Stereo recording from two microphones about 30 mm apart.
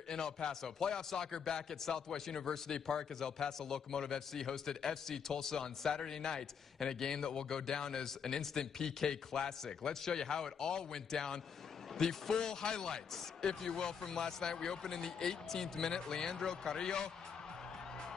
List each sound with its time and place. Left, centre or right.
0.1 s speech: left